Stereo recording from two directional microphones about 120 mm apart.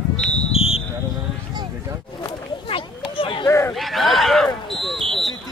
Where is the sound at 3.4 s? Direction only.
25° left (ahead or behind).